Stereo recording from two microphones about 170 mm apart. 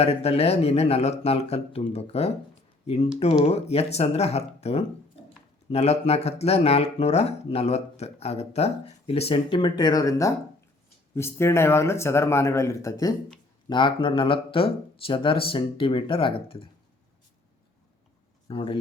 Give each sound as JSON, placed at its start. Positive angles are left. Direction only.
{"t": 0.0, "sound": "speech", "side_deg": 35}
{"t": 18.4, "sound": "speech", "side_deg": 30}